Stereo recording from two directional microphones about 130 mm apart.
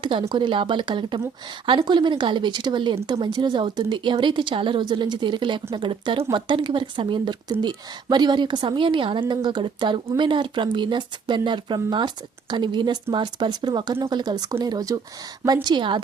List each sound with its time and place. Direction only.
0.0 s speech: 40° right (ahead or behind)